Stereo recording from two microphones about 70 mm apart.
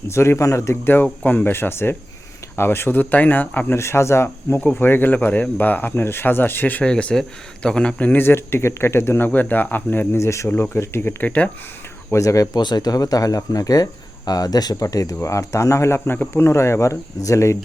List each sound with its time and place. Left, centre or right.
0.1 s speech: left
0.9 s speech: left
3.8 s speech: left
6.9 s speech: centre; by 10.2 s left
10.2 s speech: left
11.2 s speech: left
12.1 s speech: left
12.5 s speech: left